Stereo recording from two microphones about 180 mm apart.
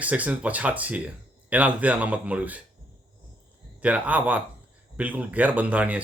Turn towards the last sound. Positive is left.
turn(degrees=-10)  # may be behind; listen again after turning